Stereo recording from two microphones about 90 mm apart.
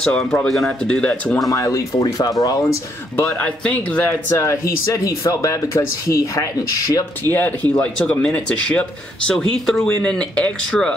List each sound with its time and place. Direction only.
0.0 s speech: 5° left (ahead or behind)
1.5 s speech: 35° left (ahead or behind)
3.3 s speech: 15° left (ahead or behind); by 7.1 s 40° left (ahead or behind)
7.2 s speech: 20° left (ahead or behind)